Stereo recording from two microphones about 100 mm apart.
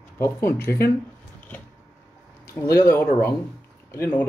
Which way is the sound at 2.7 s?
25° left (ahead or behind).